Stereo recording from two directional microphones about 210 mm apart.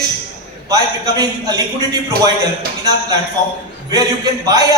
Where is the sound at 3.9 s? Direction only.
20° right (ahead or behind).